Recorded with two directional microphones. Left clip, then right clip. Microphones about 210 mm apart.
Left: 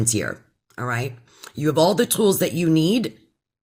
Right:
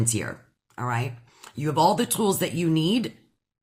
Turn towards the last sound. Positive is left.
turn(degrees=20)  # may be behind; listen again after turning